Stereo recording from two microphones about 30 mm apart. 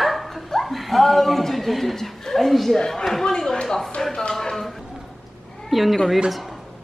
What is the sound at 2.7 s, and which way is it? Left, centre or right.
Speech, centre.